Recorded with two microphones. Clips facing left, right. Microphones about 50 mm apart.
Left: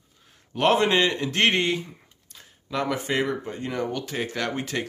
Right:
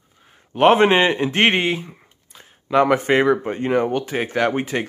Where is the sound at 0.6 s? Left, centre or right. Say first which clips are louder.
Right 7 dB; right.